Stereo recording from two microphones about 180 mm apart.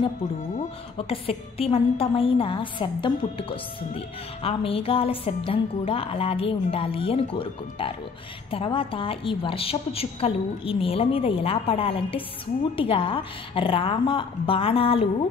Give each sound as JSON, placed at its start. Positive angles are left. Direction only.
{"t": 0.6, "sound": "a woman's voice", "side_deg": 35}